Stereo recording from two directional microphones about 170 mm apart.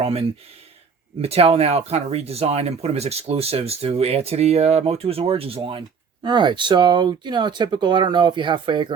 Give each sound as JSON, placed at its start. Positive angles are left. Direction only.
{"t": 0.0, "sound": "speech", "side_deg": -35}